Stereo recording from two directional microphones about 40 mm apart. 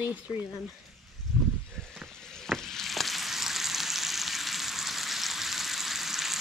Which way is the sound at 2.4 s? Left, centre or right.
Centre.